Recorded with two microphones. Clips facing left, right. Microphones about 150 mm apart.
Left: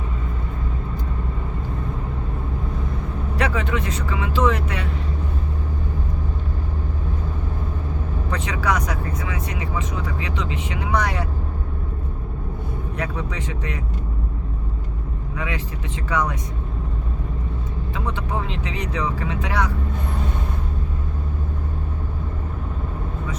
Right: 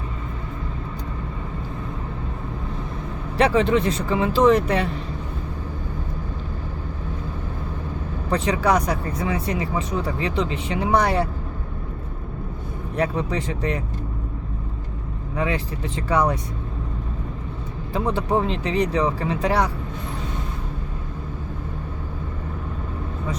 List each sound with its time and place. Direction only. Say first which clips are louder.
3.3 s speech: right 6 dB; 30° right (ahead or behind)
8.3 s speech: right 5 dB; 30° right (ahead or behind)
13.0 s speech: right 7 dB; 35° right (ahead or behind)
15.4 s speech: right 6 dB; 35° right (ahead or behind)
17.9 s speech: right 7 dB; 35° right (ahead or behind)